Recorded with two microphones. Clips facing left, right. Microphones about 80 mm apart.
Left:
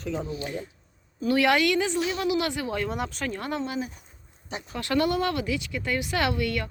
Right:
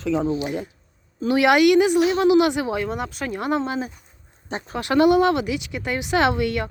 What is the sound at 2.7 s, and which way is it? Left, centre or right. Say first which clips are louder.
Speech: right 3 dB; centre.